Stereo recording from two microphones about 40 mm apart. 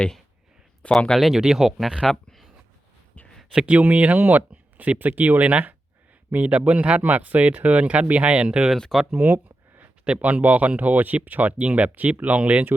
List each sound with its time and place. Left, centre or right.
0.8 s speech: left
1.3 s speech: centre
3.5 s speech: right
3.8 s speech: right
8.3 s speech: right
8.9 s speech: centre
9.2 s a sound: right
10.2 s speech: right